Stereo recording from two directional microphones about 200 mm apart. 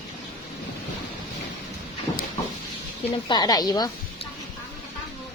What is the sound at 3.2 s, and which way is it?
Speech, 20° left (ahead or behind).